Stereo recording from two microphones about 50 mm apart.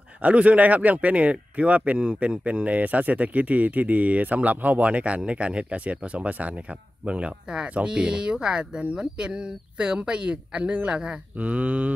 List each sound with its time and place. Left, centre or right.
0.2 s speech: right